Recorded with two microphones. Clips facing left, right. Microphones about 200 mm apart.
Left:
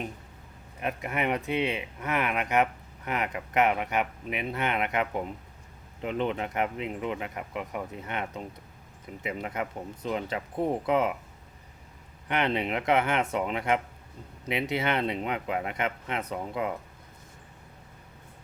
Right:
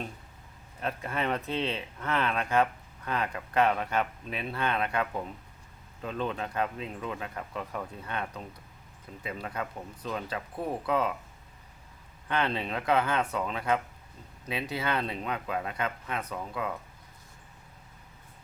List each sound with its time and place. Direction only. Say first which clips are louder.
0.8 s speech: left 2 dB; 15° left (ahead or behind)
12.3 s speech: left 3 dB; 20° left (ahead or behind)